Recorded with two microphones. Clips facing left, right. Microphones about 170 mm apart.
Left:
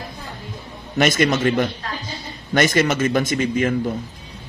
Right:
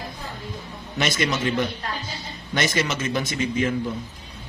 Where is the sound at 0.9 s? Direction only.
50° left (ahead or behind).